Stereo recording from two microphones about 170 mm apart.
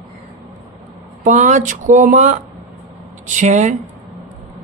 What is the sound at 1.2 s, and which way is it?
Speech, 45° right (ahead or behind).